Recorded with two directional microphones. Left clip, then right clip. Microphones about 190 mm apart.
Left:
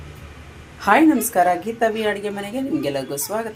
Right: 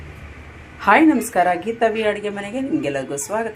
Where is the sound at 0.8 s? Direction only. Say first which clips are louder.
Right 1 dB; centre (ahead or behind).